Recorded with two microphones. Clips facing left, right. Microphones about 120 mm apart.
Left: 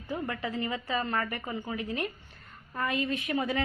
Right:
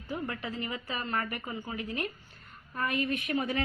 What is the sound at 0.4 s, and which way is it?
A woman's voice, 25° left (ahead or behind).